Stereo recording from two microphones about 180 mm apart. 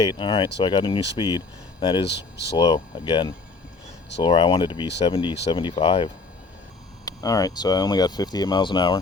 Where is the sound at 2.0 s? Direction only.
70° left (ahead or behind).